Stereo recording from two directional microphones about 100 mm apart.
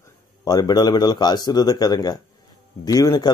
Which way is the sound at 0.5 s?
40° left (ahead or behind).